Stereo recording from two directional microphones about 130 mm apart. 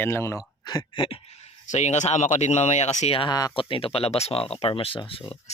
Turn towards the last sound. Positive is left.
turn(degrees=45)  # may be behind; listen again after turning